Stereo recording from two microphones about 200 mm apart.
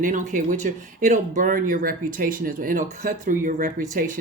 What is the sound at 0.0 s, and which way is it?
Speech, 40° right (ahead or behind).